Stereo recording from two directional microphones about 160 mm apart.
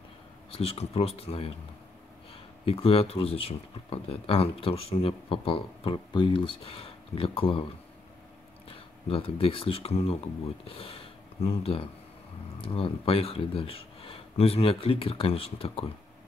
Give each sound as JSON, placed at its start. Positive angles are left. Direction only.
{"t": 0.5, "sound": "speech", "side_deg": 40}
{"t": 2.6, "sound": "speech", "side_deg": 35}
{"t": 8.6, "sound": "speech", "side_deg": 35}